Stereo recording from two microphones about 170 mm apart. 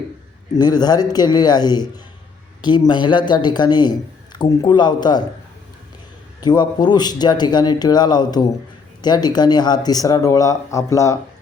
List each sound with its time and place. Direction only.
0.5 s speech: 25° left (ahead or behind)
6.4 s speech: 25° left (ahead or behind)